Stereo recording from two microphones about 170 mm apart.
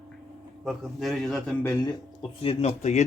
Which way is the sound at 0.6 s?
Centre (ahead or behind).